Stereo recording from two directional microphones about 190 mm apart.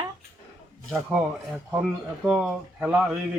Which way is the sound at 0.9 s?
5° right (ahead or behind).